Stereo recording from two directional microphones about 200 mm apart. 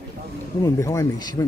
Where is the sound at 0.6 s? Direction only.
15° left (ahead or behind).